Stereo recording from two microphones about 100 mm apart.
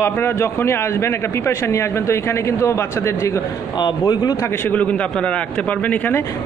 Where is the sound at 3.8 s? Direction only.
45° left (ahead or behind).